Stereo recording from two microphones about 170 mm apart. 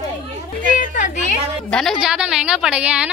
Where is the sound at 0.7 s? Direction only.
50° left (ahead or behind).